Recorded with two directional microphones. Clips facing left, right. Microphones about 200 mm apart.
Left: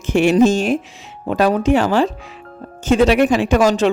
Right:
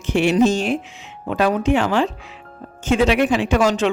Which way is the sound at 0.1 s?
45° left (ahead or behind).